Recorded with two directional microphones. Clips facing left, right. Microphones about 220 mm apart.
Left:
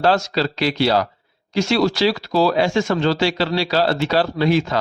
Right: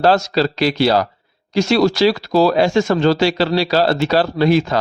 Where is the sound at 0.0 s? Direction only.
40° right (ahead or behind).